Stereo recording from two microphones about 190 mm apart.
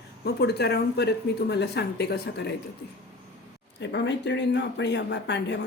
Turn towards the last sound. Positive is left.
turn(degrees=65)  # may be behind; listen again after turning